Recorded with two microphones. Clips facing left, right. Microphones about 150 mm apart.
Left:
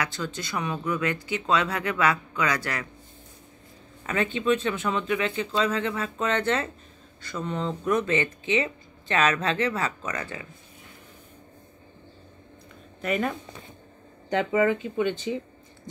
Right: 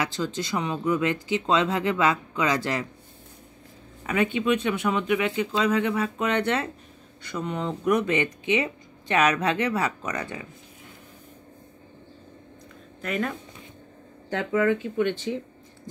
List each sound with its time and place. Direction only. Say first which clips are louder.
0.0 s speech: right 3 dB; 25° right (ahead or behind)
4.0 s speech: right 2 dB; 10° right (ahead or behind)
13.0 s speech: left 2 dB; 5° left (ahead or behind)
14.3 s speech: left 1 dB; 5° left (ahead or behind)